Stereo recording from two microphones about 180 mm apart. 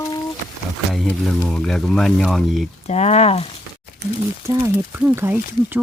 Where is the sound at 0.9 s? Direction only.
Centre (ahead or behind).